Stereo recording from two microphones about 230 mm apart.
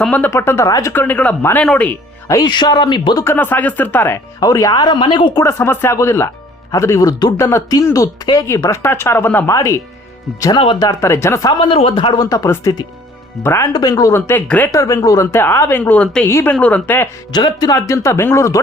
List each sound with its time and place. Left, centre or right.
0.0 s speech: centre
11.6 s speech: left